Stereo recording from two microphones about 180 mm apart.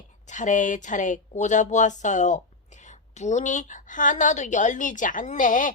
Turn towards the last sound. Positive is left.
turn(degrees=45)  # may be behind; listen again after turning